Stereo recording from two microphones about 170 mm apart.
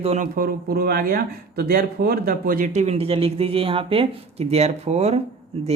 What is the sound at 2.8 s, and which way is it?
Speech, 35° right (ahead or behind).